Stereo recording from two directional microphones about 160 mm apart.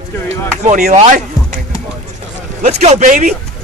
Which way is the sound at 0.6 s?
50° right (ahead or behind).